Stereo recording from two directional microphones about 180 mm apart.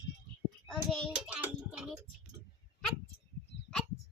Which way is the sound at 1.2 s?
5° right (ahead or behind).